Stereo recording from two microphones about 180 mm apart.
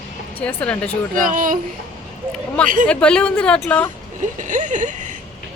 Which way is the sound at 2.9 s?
5° left (ahead or behind).